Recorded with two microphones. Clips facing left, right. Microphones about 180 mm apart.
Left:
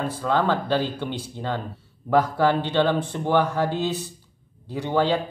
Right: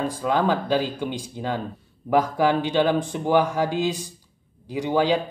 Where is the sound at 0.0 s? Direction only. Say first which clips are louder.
Right 1 dB; 15° right (ahead or behind).